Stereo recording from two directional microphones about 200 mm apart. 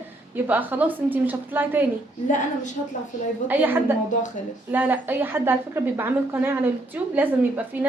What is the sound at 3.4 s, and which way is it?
A woman's voice, 10° right (ahead or behind).